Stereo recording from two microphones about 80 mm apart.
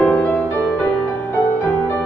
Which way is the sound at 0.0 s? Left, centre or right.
Centre.